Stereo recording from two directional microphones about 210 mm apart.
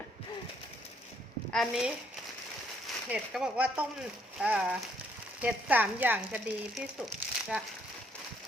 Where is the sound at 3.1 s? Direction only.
5° right (ahead or behind).